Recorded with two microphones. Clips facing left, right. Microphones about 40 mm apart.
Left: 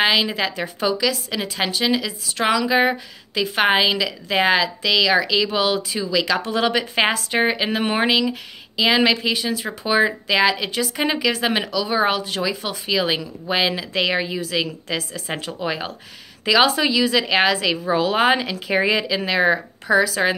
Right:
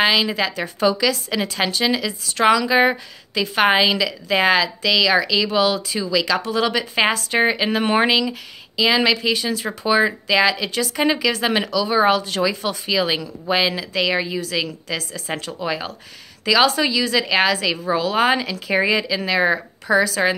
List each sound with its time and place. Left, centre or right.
0.0 s speech: centre
0.8 s speech: centre
8.2 s speech: centre